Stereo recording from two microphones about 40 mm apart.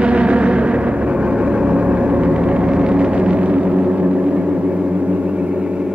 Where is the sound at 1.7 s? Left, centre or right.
Right.